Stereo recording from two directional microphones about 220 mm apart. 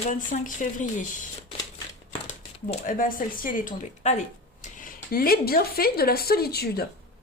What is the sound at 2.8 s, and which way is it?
Speech, 40° left (ahead or behind).